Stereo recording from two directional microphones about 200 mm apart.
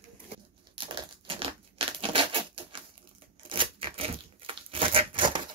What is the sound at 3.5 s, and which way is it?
Tearing, 25° right (ahead or behind).